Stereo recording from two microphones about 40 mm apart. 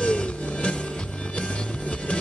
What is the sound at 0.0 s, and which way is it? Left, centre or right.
Music, left.